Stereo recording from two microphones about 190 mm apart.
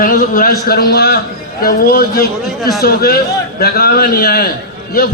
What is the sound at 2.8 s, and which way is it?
A man's voice, 50° left (ahead or behind).